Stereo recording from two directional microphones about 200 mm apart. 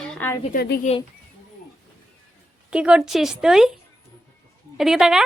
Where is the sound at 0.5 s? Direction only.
55° left (ahead or behind).